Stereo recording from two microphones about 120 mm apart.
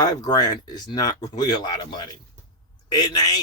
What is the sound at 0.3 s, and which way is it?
A man's voice, 35° left (ahead or behind).